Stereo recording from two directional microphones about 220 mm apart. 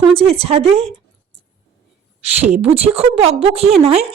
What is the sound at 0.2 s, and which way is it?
Speech, 25° right (ahead or behind).